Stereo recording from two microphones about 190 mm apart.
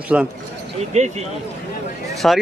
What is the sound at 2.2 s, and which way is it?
Speech, 5° left (ahead or behind).